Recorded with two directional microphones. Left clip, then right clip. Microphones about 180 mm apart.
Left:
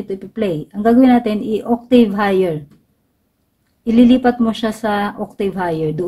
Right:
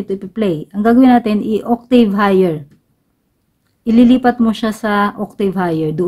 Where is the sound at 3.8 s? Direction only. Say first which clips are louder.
Right 1 dB; 35° right (ahead or behind).